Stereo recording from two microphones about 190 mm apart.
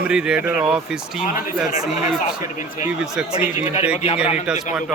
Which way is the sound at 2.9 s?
5° right (ahead or behind).